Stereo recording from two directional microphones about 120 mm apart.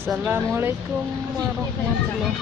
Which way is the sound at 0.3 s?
20° right (ahead or behind).